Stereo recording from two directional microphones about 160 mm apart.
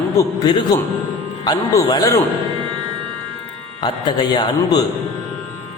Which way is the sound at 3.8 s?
30° left (ahead or behind).